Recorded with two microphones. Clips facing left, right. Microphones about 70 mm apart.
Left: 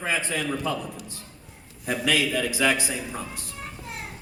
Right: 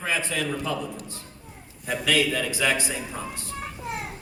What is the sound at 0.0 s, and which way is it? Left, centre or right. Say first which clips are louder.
Speech: even; centre.